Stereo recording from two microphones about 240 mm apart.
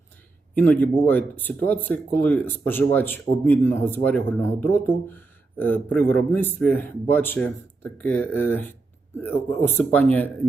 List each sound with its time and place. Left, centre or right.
0.5 s speech: centre